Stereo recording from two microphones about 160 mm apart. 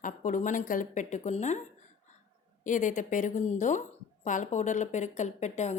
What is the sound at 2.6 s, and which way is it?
A woman's voice, 55° left (ahead or behind).